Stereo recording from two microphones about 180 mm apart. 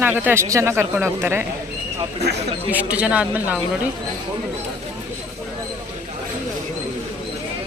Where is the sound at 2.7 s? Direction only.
10° right (ahead or behind).